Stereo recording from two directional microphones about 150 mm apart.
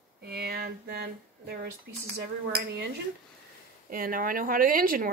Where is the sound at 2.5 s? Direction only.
90° right.